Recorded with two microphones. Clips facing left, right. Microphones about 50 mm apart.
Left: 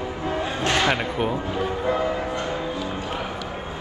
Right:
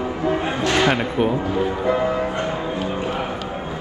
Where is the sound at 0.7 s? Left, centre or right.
Right.